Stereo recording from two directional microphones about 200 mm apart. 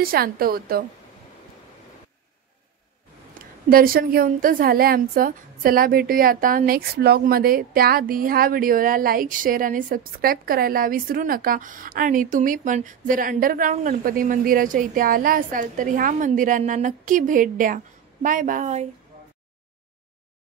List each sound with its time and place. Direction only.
0.0 s a woman's voice: 50° right (ahead or behind)
3.7 s a woman's voice: 45° right (ahead or behind)